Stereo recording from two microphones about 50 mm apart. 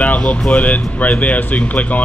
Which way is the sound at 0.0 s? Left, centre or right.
Left.